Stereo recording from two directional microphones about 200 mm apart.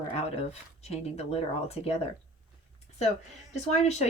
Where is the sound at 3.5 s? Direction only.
30° left (ahead or behind).